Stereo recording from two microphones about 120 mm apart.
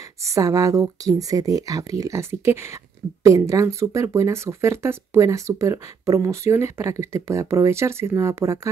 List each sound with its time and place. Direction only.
0.2 s speech: 25° right (ahead or behind)